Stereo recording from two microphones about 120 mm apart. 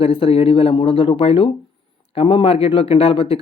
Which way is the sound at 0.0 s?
50° left (ahead or behind).